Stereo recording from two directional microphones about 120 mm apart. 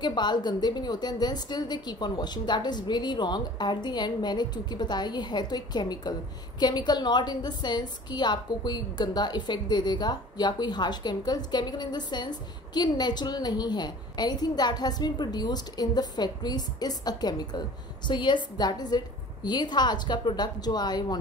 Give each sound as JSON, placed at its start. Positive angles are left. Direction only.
{"t": 0.0, "sound": "a woman's voice", "side_deg": 40}